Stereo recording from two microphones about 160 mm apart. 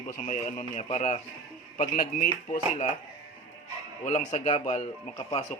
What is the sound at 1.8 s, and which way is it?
Speech, 55° left (ahead or behind).